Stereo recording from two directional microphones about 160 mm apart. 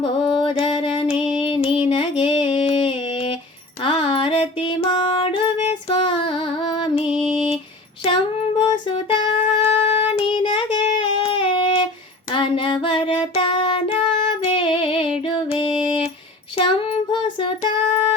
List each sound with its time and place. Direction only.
0.0 s music: 30° left (ahead or behind)
1.9 s a sound: 35° left (ahead or behind)
3.8 s music: 35° left (ahead or behind)
8.0 s child singing: 35° left (ahead or behind)
14.4 s music: 35° left (ahead or behind)
16.6 s child singing: 35° left (ahead or behind)